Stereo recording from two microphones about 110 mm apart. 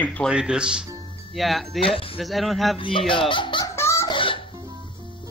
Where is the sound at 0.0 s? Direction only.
15° left (ahead or behind).